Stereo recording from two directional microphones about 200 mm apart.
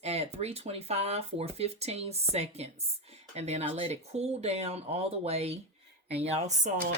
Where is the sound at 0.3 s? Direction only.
30° right (ahead or behind).